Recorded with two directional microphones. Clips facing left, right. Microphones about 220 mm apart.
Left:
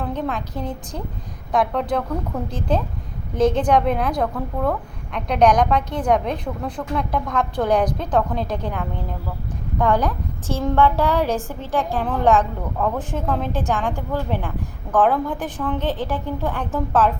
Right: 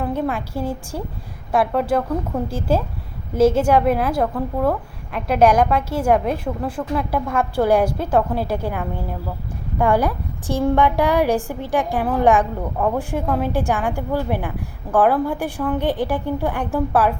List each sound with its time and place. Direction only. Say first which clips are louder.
0.0 s a woman's voice: right 3 dB; 10° right (ahead or behind)